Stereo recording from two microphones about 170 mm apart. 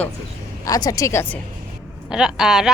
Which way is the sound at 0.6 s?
20° left (ahead or behind).